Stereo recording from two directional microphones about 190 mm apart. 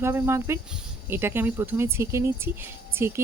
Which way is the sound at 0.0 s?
15° right (ahead or behind).